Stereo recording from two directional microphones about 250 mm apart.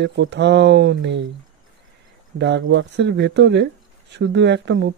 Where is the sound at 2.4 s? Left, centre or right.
Right.